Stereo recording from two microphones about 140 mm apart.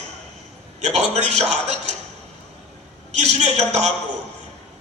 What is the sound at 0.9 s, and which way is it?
Speech, 50° right (ahead or behind).